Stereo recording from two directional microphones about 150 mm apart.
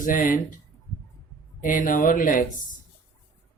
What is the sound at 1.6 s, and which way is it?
Speech, 60° left (ahead or behind).